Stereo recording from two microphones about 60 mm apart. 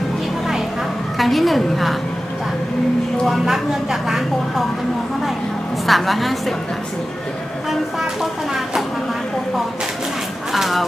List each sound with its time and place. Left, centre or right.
1.2 s speech: centre
3.2 s speech: centre
5.8 s speech: centre
7.7 s speech: centre
10.5 s speech: centre